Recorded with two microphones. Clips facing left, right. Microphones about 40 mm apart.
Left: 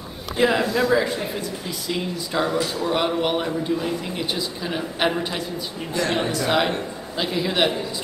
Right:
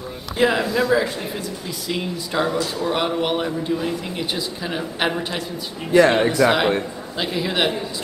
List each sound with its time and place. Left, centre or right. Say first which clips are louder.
0.4 s a man's voice: right 1 dB; centre
6.1 s speech: right 5 dB; centre
6.4 s a man's voice: right 4 dB; centre